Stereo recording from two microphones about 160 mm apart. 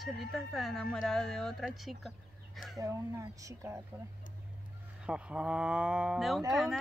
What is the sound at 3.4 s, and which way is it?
Speech, 20° right (ahead or behind).